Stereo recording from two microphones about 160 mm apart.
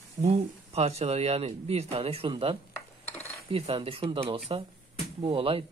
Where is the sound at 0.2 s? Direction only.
40° right (ahead or behind).